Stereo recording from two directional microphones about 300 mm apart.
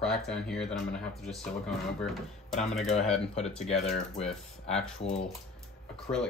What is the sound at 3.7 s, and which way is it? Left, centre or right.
Speech, left.